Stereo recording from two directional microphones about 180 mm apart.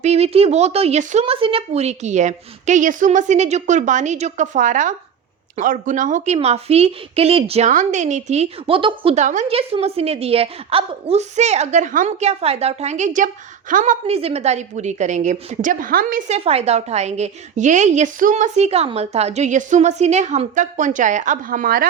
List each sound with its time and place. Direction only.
0.0 s a woman's voice: 35° right (ahead or behind)
9.1 s a woman's voice: 45° right (ahead or behind)
14.1 s a woman's voice: 35° right (ahead or behind); by 21.8 s 50° right (ahead or behind)